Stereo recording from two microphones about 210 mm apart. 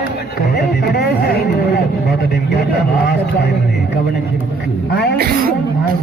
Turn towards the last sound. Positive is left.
turn(degrees=-45)  # may be behind; listen again after turning